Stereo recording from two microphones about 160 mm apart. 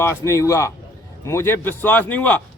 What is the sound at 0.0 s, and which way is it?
A man's voice, 20° left (ahead or behind).